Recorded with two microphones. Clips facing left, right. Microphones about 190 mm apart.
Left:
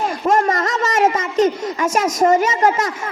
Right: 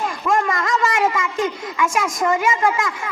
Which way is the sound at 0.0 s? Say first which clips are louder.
Left 3 dB; 40° left (ahead or behind).